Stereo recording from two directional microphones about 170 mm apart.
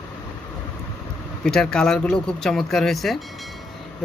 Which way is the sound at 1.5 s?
5° left (ahead or behind).